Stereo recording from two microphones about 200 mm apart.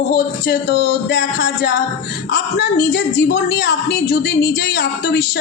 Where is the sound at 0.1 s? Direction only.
55° left (ahead or behind).